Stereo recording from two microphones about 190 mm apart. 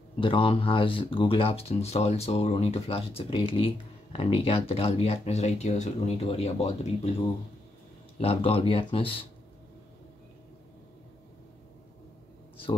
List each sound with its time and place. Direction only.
0.2 s speech: 25° left (ahead or behind)